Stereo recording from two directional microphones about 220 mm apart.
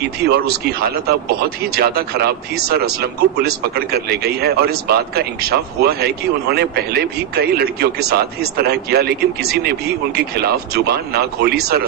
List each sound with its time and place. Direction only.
0.0 s speech: 45° right (ahead or behind)